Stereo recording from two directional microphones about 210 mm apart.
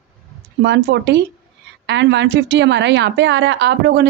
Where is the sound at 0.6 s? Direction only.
55° right (ahead or behind).